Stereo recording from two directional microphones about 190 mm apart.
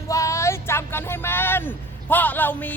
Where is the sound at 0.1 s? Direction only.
15° left (ahead or behind).